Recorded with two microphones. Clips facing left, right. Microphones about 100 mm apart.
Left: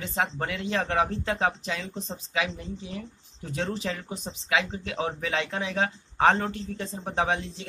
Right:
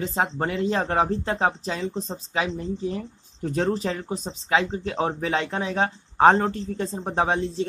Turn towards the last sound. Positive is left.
turn(degrees=-35)  # may be behind; listen again after turning